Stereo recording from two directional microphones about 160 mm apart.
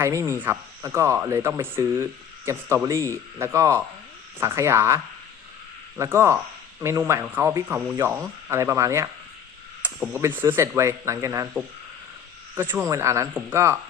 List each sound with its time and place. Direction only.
0.0 s speech: 15° right (ahead or behind)
6.0 s speech: 15° right (ahead or behind)